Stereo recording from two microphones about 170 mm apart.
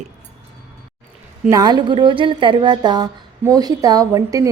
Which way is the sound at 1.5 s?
20° right (ahead or behind).